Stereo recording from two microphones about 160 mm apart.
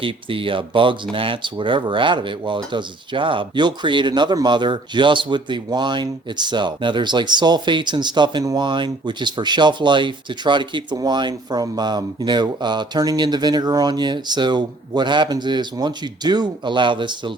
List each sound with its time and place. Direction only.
0.0 s speech: 35° right (ahead or behind)